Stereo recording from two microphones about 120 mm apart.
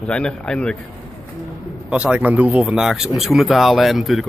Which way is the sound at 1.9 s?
10° right (ahead or behind).